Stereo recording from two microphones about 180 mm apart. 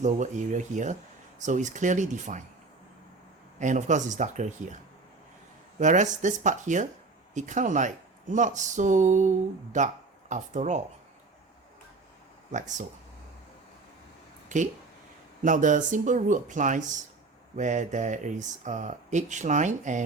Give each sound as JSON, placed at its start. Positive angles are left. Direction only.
{"t": 0.0, "sound": "speech", "side_deg": -45}
{"t": 3.6, "sound": "speech", "side_deg": -40}
{"t": 5.8, "sound": "speech", "side_deg": -45}
{"t": 12.5, "sound": "speech", "side_deg": -45}
{"t": 14.5, "sound": "speech", "side_deg": -40}